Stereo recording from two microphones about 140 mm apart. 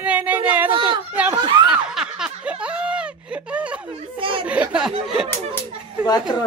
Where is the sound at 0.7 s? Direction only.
35° right (ahead or behind).